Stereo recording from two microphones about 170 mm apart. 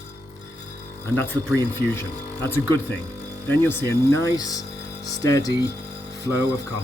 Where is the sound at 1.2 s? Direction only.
15° left (ahead or behind).